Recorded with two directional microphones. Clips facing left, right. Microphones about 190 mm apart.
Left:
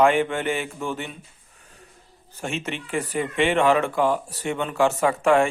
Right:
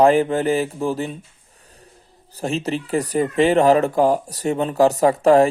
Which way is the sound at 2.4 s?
35° right (ahead or behind).